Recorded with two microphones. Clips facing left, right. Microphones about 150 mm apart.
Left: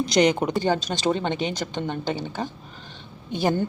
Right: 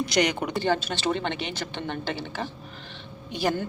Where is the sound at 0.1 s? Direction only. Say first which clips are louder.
Left 8 dB; 25° left (ahead or behind).